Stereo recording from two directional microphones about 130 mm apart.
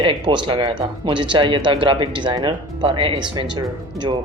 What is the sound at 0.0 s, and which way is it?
Speech, 40° right (ahead or behind).